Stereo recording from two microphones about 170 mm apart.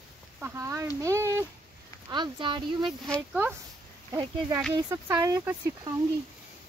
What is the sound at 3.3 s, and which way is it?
Speech, 10° right (ahead or behind).